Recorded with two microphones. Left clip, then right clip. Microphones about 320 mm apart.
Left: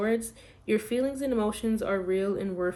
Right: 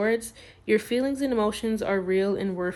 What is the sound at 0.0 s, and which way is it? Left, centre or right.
Speech, right.